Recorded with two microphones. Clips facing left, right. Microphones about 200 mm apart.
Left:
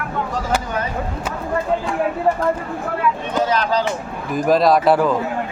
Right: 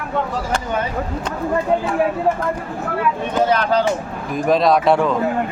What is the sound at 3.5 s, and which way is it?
Speech, 55° right (ahead or behind).